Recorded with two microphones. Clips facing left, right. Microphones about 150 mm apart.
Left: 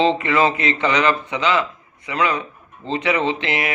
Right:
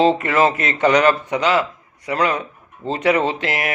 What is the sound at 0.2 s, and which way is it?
A man's voice, 45° right (ahead or behind).